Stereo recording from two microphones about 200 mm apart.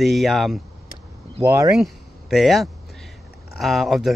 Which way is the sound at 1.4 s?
15° right (ahead or behind).